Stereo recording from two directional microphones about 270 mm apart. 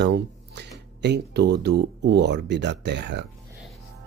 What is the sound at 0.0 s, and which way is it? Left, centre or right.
Speech, right.